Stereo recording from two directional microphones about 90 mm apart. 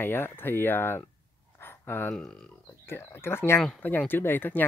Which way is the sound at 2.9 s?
25° left (ahead or behind).